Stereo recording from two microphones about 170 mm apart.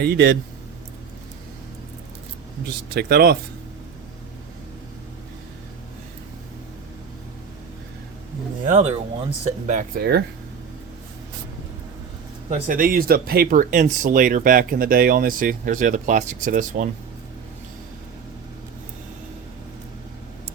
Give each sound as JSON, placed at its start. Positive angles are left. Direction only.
{"t": 0.0, "sound": "speech", "side_deg": -80}
{"t": 2.6, "sound": "speech", "side_deg": -70}
{"t": 8.6, "sound": "speech", "side_deg": -45}
{"t": 9.6, "sound": "speech", "side_deg": -50}
{"t": 10.0, "sound": "speech", "side_deg": -70}
{"t": 12.5, "sound": "speech", "side_deg": -50}